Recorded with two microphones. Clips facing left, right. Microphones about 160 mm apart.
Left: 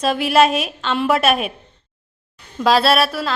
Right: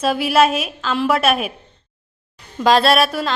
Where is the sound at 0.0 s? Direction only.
Centre (ahead or behind).